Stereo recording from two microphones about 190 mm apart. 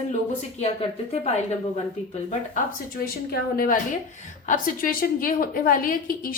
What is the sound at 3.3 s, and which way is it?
A woman's voice, 50° left (ahead or behind).